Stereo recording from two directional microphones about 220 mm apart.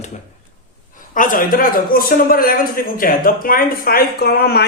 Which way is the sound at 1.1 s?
40° left (ahead or behind).